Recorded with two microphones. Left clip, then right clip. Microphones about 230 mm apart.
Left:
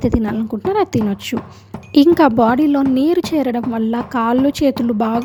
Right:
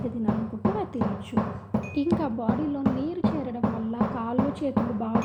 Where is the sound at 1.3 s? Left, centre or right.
Left.